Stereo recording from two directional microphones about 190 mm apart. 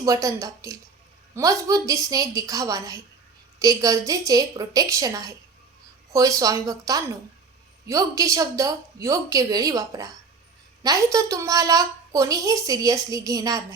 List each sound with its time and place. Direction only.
0.0 s a woman's voice: 15° right (ahead or behind)